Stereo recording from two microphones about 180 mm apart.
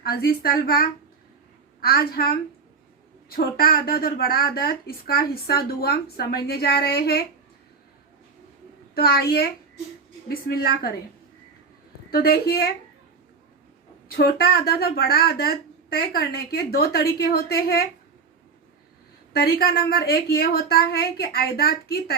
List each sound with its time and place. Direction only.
0.0 s a woman's voice: 60° left (ahead or behind)
9.0 s a woman's voice: 60° left (ahead or behind)
12.1 s a woman's voice: 60° left (ahead or behind)
14.2 s a woman's voice: 60° left (ahead or behind)
19.3 s a woman's voice: 60° left (ahead or behind)